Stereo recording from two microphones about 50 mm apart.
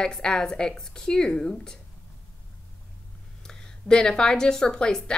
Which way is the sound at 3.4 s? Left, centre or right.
Centre.